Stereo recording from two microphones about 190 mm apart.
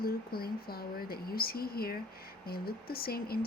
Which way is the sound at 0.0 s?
55° left (ahead or behind).